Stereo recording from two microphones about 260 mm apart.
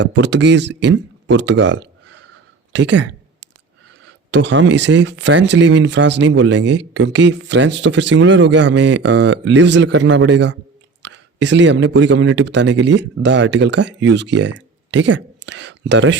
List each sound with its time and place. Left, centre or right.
0.0 s a man's voice: right
4.3 s speech: right